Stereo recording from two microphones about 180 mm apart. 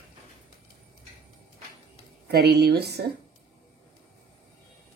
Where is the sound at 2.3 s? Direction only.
60° right (ahead or behind).